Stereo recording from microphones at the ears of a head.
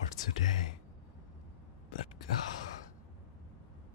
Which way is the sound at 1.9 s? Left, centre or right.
Left.